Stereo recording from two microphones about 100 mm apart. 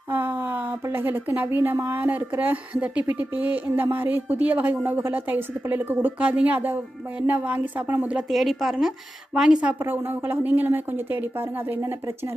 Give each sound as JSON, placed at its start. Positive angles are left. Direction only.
{"t": 0.1, "sound": "a sound", "side_deg": -20}
{"t": 0.9, "sound": "speech", "side_deg": -20}
{"t": 8.3, "sound": "a woman's voice", "side_deg": 0}